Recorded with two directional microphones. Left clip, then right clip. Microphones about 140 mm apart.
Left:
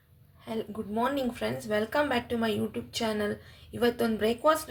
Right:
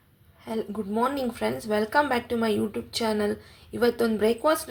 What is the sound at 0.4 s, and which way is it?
Speech, 25° right (ahead or behind).